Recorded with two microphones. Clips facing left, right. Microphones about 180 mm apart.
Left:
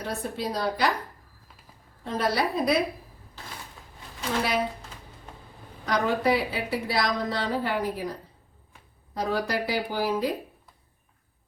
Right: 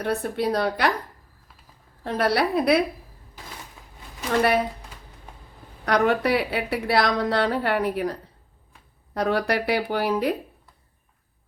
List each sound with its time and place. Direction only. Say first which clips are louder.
0.0 s a woman's voice: right 6 dB; 60° right (ahead or behind)
2.0 s a woman's voice: right 4 dB; 65° right (ahead or behind)
5.8 s a woman's voice: right 4 dB; 65° right (ahead or behind)
9.1 s a woman's voice: right 4 dB; 65° right (ahead or behind)